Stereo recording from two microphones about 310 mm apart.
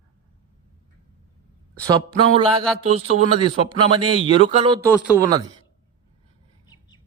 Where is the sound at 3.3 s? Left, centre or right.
Centre.